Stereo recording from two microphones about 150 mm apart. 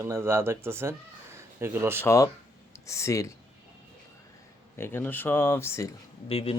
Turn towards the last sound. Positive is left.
turn(degrees=40)  # may be behind; listen again after turning